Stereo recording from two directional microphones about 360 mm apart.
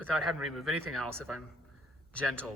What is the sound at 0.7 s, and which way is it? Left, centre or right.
Speech, right.